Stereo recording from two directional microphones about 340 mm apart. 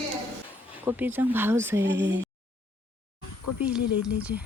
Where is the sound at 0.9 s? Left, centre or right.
Centre.